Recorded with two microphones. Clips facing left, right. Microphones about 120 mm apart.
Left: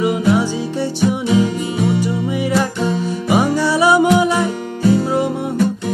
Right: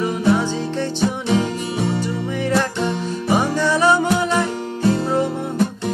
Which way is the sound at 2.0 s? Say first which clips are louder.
Left 4 dB; 10° left (ahead or behind).